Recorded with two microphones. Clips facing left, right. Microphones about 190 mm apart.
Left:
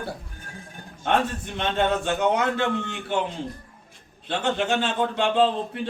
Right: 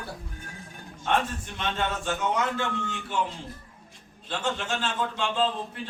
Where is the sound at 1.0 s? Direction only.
60° left (ahead or behind).